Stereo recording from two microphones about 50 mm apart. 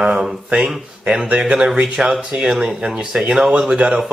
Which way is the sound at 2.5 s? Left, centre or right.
Centre.